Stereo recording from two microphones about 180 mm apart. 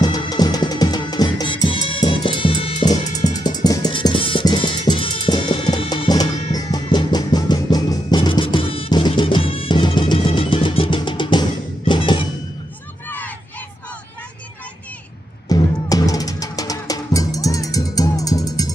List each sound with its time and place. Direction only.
0.0 s music: 20° left (ahead or behind)
15.4 s music: 20° left (ahead or behind)